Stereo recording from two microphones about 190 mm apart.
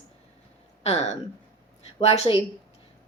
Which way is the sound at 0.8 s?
35° left (ahead or behind).